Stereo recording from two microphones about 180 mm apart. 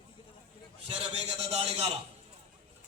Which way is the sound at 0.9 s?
35° right (ahead or behind).